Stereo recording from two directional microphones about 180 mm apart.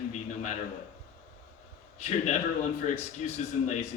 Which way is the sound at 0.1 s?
40° left (ahead or behind).